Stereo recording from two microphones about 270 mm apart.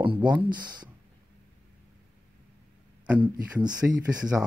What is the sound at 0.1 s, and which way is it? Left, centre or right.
Speech, centre.